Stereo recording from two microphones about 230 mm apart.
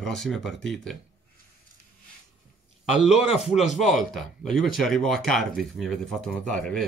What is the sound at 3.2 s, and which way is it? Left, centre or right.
Speech, left.